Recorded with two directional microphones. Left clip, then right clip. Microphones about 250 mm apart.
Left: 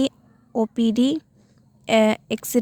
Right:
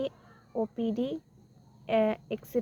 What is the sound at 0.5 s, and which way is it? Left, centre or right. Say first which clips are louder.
A woman's voice: left 9 dB; left.